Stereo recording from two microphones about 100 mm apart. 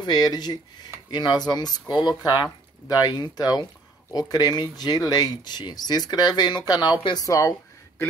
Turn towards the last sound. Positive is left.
turn(degrees=35)  # may be behind; listen again after turning